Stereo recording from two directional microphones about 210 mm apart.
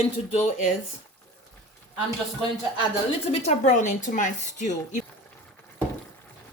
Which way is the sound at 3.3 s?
30° left (ahead or behind).